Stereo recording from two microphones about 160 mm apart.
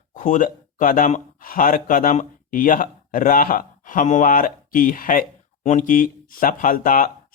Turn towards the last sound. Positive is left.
turn(degrees=60)  # may be behind; listen again after turning